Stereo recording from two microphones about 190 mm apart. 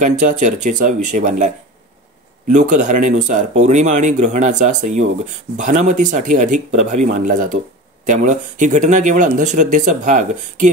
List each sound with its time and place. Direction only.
0.0 s speech: 40° right (ahead or behind)
2.5 s speech: 40° right (ahead or behind)